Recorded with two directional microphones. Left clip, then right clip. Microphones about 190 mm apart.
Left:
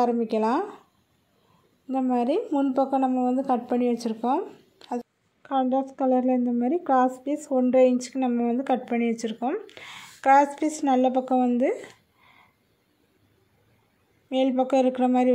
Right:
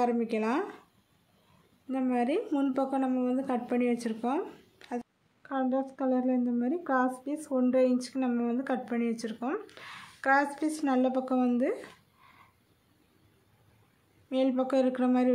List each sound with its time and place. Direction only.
0.0 s a woman's voice: 15° left (ahead or behind)
1.9 s a woman's voice: 15° left (ahead or behind)
14.3 s a woman's voice: 10° left (ahead or behind)